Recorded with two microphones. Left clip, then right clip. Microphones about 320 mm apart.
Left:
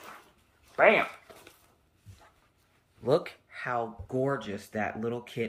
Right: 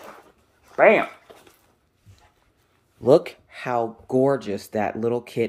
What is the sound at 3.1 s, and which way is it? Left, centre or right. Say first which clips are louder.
Speech: right 10 dB; right.